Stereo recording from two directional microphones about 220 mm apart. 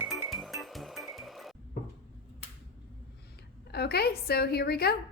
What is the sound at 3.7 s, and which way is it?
A woman's voice, 45° left (ahead or behind).